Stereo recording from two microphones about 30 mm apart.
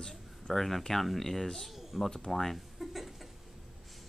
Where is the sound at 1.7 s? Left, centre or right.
Centre.